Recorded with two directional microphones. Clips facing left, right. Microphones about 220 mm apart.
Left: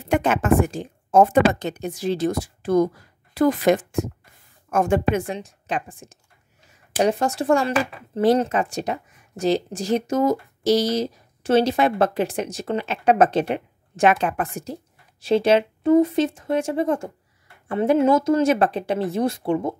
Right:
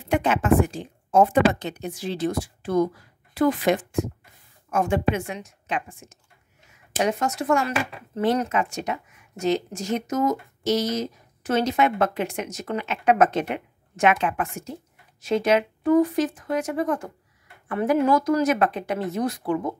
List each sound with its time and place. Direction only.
0.0 s a woman's voice: 45° left (ahead or behind); by 19.7 s 25° left (ahead or behind)